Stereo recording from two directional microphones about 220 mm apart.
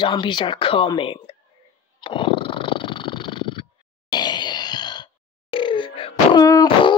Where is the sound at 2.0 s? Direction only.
25° left (ahead or behind).